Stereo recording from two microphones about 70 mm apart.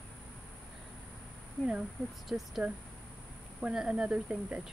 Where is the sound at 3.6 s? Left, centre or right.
Centre.